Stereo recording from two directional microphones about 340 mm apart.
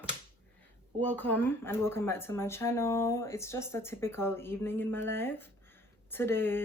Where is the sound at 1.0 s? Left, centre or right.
Centre.